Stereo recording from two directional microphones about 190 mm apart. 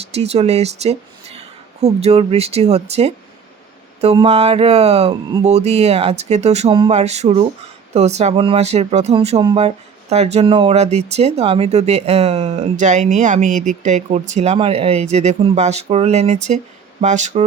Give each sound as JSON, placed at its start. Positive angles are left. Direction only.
{"t": 0.0, "sound": "speech", "side_deg": -35}